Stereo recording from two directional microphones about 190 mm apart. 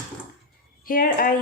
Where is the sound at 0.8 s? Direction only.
50° left (ahead or behind).